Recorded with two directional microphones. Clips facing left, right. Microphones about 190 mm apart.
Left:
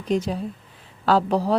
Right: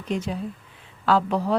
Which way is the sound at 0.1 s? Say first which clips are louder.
Left 4 dB; 35° left (ahead or behind).